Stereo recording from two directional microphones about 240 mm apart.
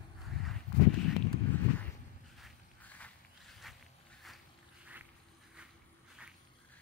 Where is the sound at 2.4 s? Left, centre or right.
Centre.